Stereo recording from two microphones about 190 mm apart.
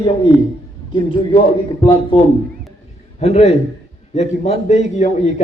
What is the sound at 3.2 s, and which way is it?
A man's voice, 35° left (ahead or behind).